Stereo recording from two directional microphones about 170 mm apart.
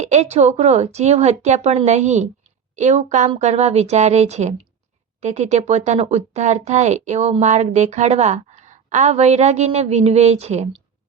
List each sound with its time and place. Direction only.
0.0 s speech: 45° right (ahead or behind)